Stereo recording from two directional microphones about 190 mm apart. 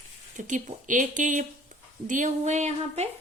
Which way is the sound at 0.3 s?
40° right (ahead or behind).